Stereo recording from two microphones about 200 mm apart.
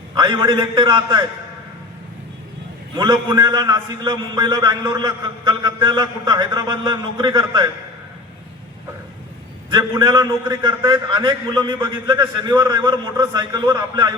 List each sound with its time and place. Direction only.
0.1 s a man's voice: 20° right (ahead or behind)
2.9 s a man's voice: 15° right (ahead or behind)
9.7 s a man's voice: 20° right (ahead or behind)